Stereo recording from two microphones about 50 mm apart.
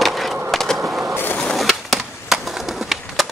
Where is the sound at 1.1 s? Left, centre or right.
Left.